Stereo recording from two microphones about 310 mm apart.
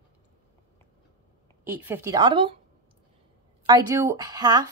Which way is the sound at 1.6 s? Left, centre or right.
Centre.